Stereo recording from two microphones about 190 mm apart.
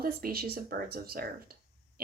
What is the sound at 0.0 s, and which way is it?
Speech, 50° right (ahead or behind).